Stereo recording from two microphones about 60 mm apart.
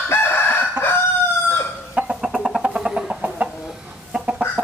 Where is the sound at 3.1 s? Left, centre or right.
Right.